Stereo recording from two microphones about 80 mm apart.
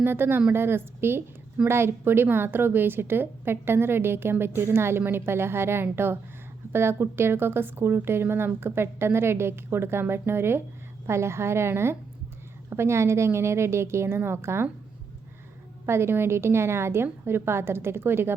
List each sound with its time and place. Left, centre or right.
0.0 s a woman's voice: right
15.9 s speech: right